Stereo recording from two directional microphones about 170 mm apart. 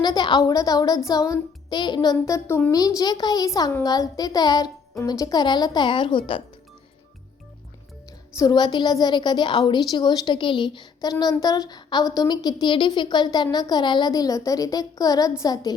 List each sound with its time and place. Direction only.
0.0 s a woman's voice: 25° left (ahead or behind)
8.4 s a woman's voice: 25° left (ahead or behind)